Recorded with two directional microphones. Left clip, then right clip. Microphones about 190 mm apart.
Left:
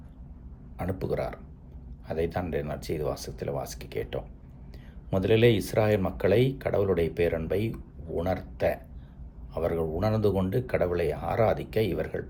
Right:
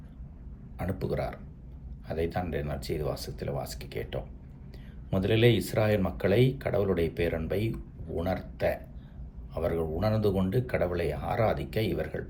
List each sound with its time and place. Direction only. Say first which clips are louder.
0.8 s speech: left 2 dB; 20° left (ahead or behind)